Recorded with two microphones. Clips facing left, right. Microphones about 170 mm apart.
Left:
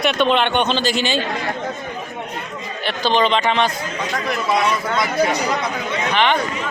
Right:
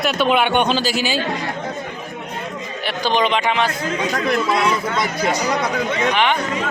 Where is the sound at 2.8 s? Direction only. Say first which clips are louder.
Left 1 dB; 10° right (ahead or behind).